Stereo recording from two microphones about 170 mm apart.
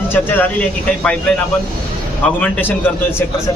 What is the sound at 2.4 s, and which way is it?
Speech, 10° left (ahead or behind).